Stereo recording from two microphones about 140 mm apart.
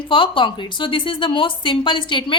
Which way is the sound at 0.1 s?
35° left (ahead or behind).